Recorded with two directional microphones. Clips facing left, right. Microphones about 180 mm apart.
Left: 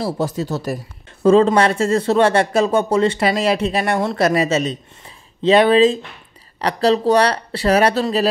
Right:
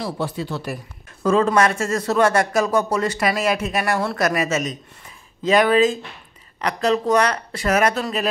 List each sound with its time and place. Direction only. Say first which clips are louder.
0.0 s speech: left 4 dB; 40° left (ahead or behind)
1.2 s speech: left 5 dB; 30° left (ahead or behind)